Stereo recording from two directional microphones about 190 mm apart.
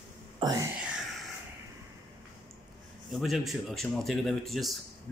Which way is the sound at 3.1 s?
Centre (ahead or behind).